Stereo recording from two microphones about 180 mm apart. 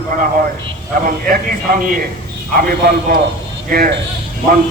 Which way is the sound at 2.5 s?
55° right (ahead or behind).